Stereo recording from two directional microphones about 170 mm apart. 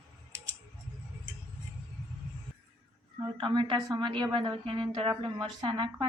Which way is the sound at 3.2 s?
25° right (ahead or behind).